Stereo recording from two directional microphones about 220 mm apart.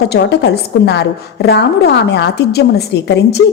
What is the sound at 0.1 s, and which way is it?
A woman's voice, 50° left (ahead or behind).